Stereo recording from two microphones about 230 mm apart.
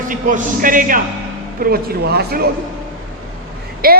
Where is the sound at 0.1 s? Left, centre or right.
Right.